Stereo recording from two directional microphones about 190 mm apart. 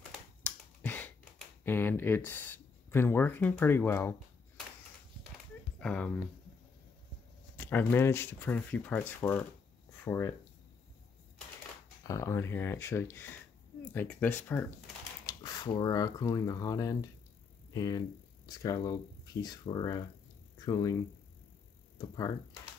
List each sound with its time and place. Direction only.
0.4 s finger snapping: 10° left (ahead or behind)
1.6 s speech: 10° left (ahead or behind)
5.8 s speech: 5° left (ahead or behind)
7.5 s speech: 10° left (ahead or behind)
12.0 s speech: 15° left (ahead or behind)
15.2 s speech: 20° left (ahead or behind)